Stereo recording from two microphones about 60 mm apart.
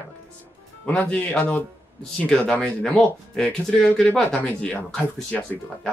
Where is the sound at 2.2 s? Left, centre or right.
Centre.